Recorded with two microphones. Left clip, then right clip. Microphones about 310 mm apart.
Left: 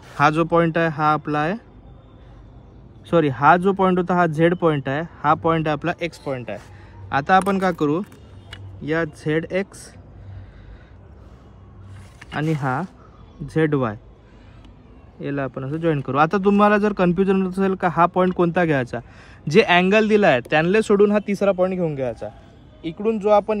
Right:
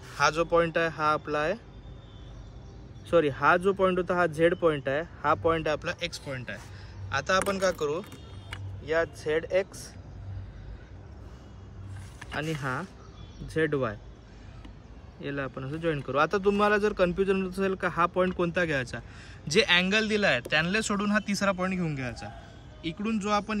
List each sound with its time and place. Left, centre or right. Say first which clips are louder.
0.2 s speech: left 7 dB; left
3.1 s speech: left 7 dB; left
12.4 s speech: left 8 dB; centre
15.1 s speech: left 8 dB; centre